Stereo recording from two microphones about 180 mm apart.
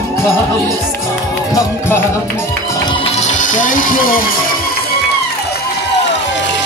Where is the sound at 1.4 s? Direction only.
20° left (ahead or behind); by 5.0 s 60° left (ahead or behind).